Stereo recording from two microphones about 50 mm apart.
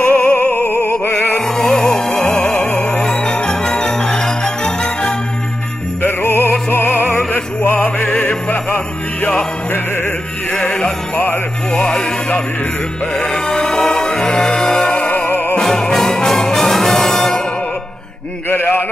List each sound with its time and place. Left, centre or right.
0.0 s opera: left
1.0 s music: left
1.4 s music: centre
2.1 s music: left
2.8 s music: left
6.0 s music: left
7.3 s opera: left
8.2 s music: left
10.5 s music: centre
13.5 s music: centre
14.5 s music: left
15.6 s music: centre
18.5 s a sound: left